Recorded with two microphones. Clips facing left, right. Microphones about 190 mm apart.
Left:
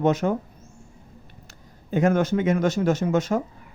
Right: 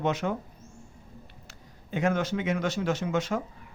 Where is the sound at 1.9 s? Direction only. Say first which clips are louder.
Left 6 dB; 45° left (ahead or behind).